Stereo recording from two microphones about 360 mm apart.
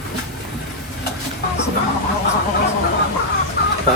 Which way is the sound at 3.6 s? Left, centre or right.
Left.